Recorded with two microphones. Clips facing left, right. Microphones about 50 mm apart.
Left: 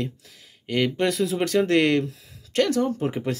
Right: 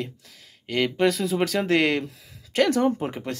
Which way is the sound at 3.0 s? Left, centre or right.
Centre.